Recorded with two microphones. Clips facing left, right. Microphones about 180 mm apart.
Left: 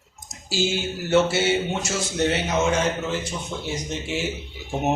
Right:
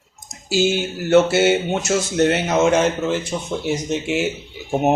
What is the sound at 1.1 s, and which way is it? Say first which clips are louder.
Speech: right 6 dB; 60° right (ahead or behind).